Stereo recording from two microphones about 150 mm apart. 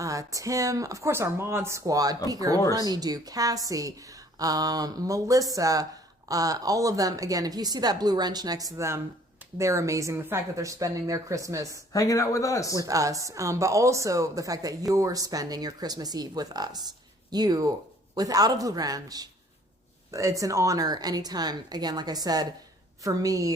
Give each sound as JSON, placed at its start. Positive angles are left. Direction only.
{"t": 0.0, "sound": "a woman's voice", "side_deg": -20}
{"t": 11.9, "sound": "a man's voice", "side_deg": 25}
{"t": 12.7, "sound": "a woman's voice", "side_deg": -20}